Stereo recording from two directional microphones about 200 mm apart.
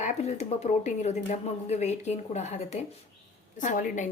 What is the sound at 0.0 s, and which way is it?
A woman's voice, 35° left (ahead or behind).